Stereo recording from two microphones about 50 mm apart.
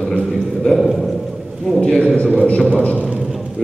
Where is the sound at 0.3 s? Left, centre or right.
Centre.